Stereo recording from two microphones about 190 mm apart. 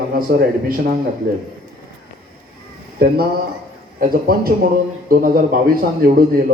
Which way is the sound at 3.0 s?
55° right (ahead or behind).